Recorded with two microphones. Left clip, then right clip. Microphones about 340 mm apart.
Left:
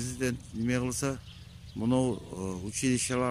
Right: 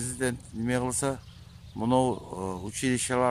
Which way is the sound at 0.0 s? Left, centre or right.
Right.